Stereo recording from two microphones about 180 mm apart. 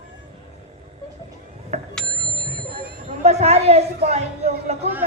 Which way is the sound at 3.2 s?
35° right (ahead or behind).